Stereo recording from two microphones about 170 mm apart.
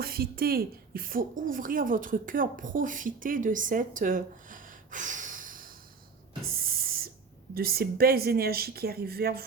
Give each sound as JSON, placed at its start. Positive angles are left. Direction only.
{"t": 0.0, "sound": "speech", "side_deg": -65}
{"t": 6.4, "sound": "a sound", "side_deg": -60}
{"t": 7.5, "sound": "speech", "side_deg": -65}